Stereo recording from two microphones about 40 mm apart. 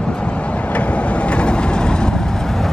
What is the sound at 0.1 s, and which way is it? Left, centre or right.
Vehicle, left.